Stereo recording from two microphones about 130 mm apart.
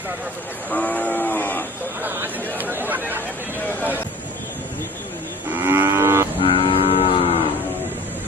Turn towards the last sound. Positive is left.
turn(degrees=50)  # may be behind; listen again after turning